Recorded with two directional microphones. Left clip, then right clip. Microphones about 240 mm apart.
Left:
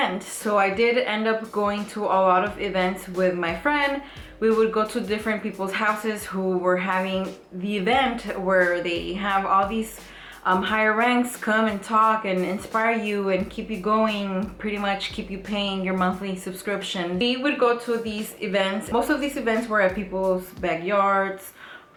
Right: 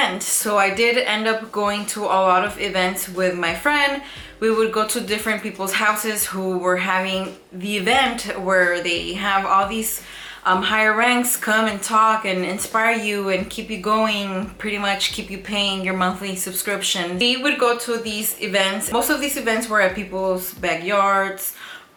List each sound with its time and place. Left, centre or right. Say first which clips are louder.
0.0 s speech: right 4 dB; centre
6.3 s speech: right 1 dB; left
6.7 s speech: right 5 dB; centre
20.1 s speech: right 2 dB; left
20.6 s speech: right 5 dB; centre